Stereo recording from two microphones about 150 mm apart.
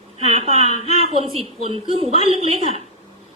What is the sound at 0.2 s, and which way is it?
A woman's voice, 45° right (ahead or behind).